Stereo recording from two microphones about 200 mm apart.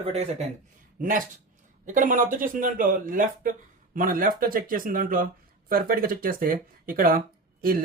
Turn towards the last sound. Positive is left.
turn(degrees=-45)  # may be behind; listen again after turning